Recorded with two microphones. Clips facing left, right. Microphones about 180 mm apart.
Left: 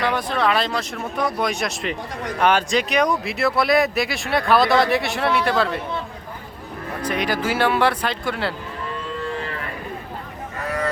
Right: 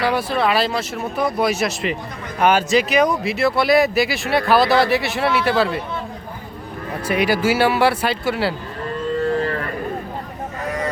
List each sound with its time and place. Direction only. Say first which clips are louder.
0.0 s speech: right 2 dB; 5° right (ahead or behind)
7.0 s speech: right 5 dB; 10° right (ahead or behind)
9.2 s moo: right 9 dB; 40° right (ahead or behind)